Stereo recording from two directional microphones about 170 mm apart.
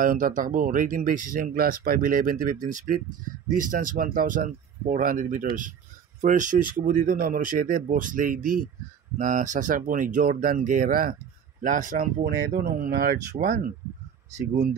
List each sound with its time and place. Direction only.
0.0 s speech: 55° right (ahead or behind)